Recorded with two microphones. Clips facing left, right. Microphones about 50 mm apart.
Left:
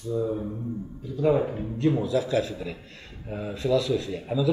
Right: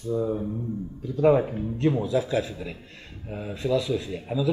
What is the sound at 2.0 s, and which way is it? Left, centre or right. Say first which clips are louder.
A man's voice: even; centre.